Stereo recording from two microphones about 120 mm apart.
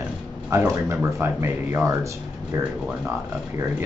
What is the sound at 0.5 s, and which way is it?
Speech, 20° right (ahead or behind).